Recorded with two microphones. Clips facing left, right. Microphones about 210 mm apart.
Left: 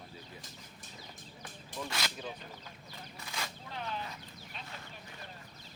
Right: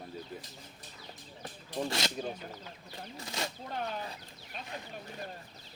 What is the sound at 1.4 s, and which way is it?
Speech, 40° right (ahead or behind).